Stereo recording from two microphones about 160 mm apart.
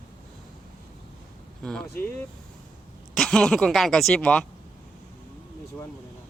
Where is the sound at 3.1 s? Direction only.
5° left (ahead or behind).